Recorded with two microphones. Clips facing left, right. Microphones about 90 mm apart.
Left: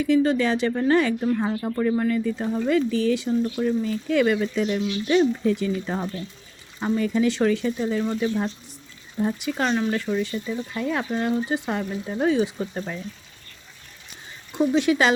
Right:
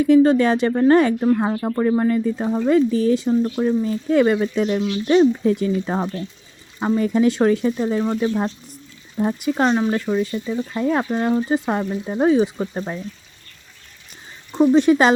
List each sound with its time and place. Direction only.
0.0 s speech: 45° right (ahead or behind)
9.5 s speech: 30° right (ahead or behind)
10.8 s speech: 40° right (ahead or behind)
14.6 s speech: 40° right (ahead or behind)